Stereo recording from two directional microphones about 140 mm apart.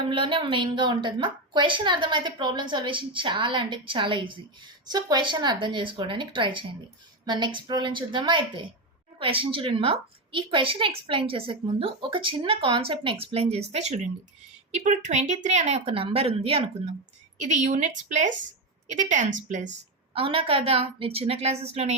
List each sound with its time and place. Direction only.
0.1 s a woman's voice: 40° right (ahead or behind)
17.3 s a woman's voice: 60° right (ahead or behind)
20.1 s a woman's voice: 40° right (ahead or behind)